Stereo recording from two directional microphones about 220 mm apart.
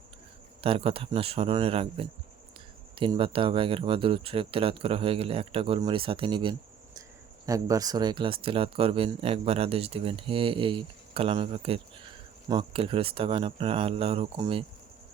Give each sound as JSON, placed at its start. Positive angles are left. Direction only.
{"t": 0.6, "sound": "speech", "side_deg": -25}